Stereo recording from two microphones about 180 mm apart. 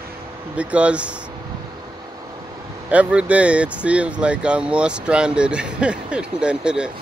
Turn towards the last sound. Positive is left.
turn(degrees=-5)  # may be behind; listen again after turning